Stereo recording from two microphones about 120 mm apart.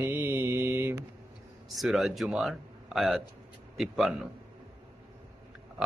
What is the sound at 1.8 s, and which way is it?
Mantra, centre (ahead or behind).